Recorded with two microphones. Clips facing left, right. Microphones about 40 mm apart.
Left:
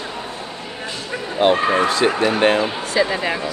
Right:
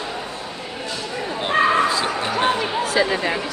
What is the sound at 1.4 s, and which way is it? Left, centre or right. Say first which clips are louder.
Speech: left 6 dB; left.